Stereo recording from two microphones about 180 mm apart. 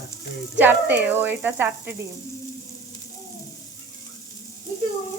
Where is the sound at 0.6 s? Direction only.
10° right (ahead or behind).